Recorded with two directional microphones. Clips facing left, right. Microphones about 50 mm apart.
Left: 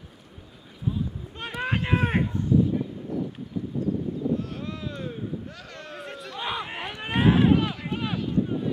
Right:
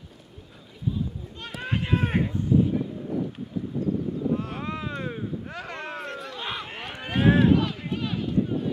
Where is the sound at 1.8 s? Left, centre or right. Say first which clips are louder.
Even; centre.